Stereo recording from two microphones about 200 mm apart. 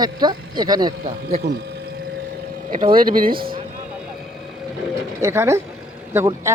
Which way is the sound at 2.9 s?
45° right (ahead or behind).